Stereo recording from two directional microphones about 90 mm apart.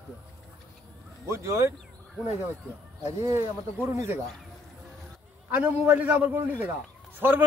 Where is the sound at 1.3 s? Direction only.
30° right (ahead or behind).